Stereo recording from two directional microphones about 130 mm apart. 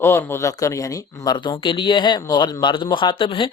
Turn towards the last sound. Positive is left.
turn(degrees=40)  # may be behind; listen again after turning